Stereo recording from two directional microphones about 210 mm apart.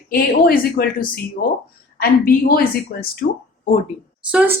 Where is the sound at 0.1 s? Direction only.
45° left (ahead or behind).